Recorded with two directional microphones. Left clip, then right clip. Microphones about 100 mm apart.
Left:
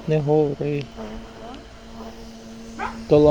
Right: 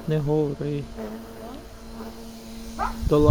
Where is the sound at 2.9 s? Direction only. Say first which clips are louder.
Left 6 dB; 20° right (ahead or behind).